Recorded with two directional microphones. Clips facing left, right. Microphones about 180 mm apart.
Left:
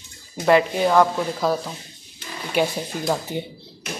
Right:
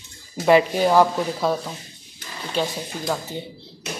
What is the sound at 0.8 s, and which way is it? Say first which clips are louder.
Speech: even; 10° right (ahead or behind).